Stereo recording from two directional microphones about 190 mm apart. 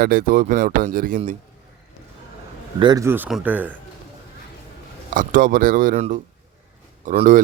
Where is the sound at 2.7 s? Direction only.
20° right (ahead or behind).